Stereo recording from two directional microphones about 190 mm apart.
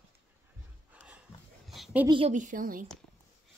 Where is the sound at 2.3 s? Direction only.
45° right (ahead or behind).